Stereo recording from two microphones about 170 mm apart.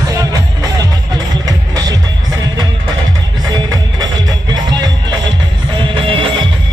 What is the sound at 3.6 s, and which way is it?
Music, 25° right (ahead or behind).